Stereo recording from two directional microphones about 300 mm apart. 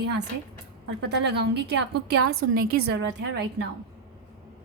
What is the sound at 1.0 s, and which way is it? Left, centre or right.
A woman's voice, right.